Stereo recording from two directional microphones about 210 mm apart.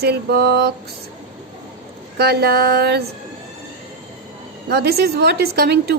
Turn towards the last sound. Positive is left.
turn(degrees=-50)  # may be behind; listen again after turning